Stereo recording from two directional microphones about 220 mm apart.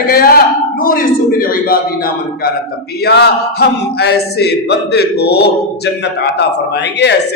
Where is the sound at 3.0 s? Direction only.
45° left (ahead or behind).